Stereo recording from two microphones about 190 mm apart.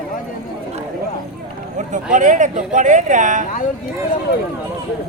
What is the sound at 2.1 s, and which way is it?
Speech, 40° right (ahead or behind).